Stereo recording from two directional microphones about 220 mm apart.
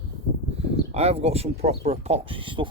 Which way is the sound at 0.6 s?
25° right (ahead or behind).